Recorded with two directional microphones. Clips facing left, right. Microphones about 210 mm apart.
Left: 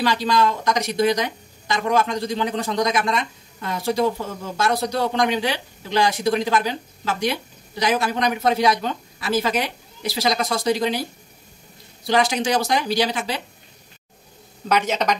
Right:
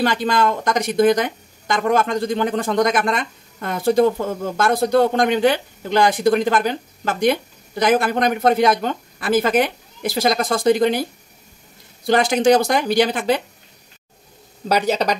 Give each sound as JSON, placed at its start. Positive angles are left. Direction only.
{"t": 0.0, "sound": "speech", "side_deg": -55}
{"t": 12.1, "sound": "speech", "side_deg": -50}
{"t": 14.7, "sound": "speech", "side_deg": -35}